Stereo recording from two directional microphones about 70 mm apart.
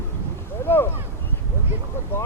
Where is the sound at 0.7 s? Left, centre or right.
Left.